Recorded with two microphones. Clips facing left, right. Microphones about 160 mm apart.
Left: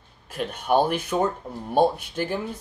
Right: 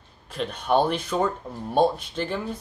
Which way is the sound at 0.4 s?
10° left (ahead or behind).